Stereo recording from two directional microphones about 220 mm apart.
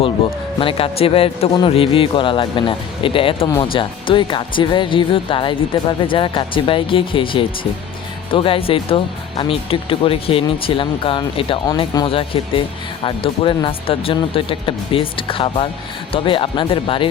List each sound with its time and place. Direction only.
0.6 s speech: 25° left (ahead or behind)